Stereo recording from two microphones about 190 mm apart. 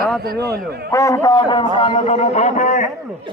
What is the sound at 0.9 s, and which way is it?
A man's voice, 15° left (ahead or behind).